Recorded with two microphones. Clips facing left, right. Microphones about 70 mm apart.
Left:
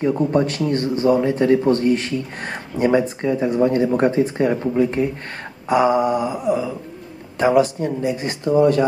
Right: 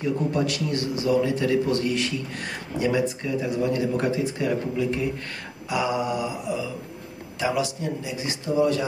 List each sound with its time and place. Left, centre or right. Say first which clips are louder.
0.0 s a man's voice: left 6 dB; left